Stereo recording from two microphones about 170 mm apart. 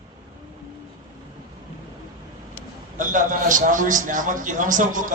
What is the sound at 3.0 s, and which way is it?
A man's voice, 50° right (ahead or behind).